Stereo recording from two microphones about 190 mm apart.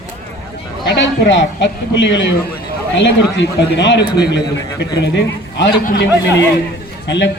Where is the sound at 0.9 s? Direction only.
70° left (ahead or behind).